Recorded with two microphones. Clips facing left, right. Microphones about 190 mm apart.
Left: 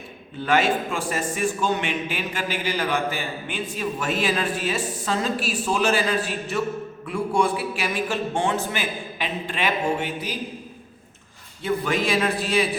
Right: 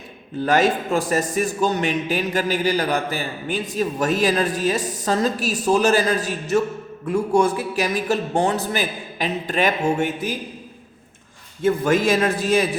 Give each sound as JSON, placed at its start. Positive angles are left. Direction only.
{"t": 0.4, "sound": "a man's voice", "side_deg": -40}
{"t": 11.6, "sound": "a man's voice", "side_deg": -45}